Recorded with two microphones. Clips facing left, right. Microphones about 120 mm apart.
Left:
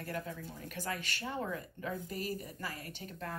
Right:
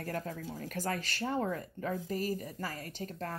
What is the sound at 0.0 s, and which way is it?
Speech, 40° right (ahead or behind).